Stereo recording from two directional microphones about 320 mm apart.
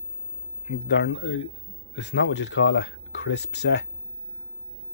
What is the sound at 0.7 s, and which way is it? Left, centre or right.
Speech, left.